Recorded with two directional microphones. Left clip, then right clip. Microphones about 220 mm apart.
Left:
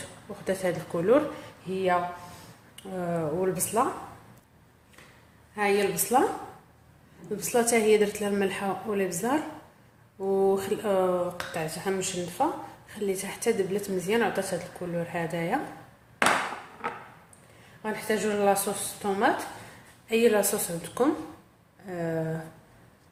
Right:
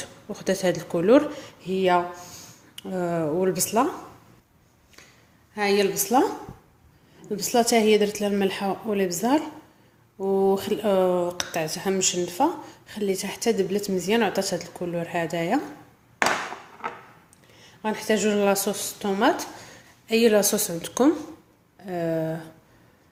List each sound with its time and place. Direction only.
0.4 s a woman's voice: 40° right (ahead or behind)
5.5 s a woman's voice: 40° right (ahead or behind)
7.3 s a woman's voice: 30° right (ahead or behind)
17.8 s a woman's voice: 40° right (ahead or behind)